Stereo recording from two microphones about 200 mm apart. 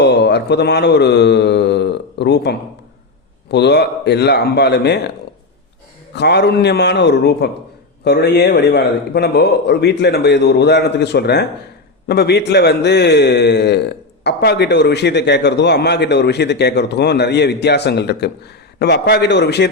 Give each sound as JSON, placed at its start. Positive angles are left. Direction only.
{"t": 0.0, "sound": "mantra", "side_deg": 60}
{"t": 3.5, "sound": "a man's voice", "side_deg": 60}
{"t": 6.1, "sound": "a man's voice", "side_deg": 55}